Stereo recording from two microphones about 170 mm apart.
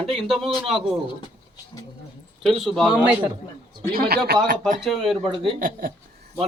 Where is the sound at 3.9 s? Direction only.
65° right (ahead or behind).